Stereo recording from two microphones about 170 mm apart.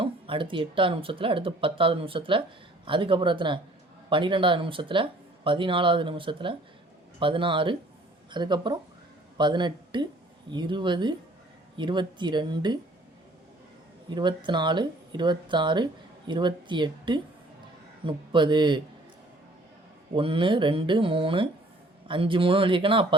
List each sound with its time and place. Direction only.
0.0 s speech: 30° right (ahead or behind)
14.2 s speech: 25° right (ahead or behind)
20.1 s speech: 30° right (ahead or behind)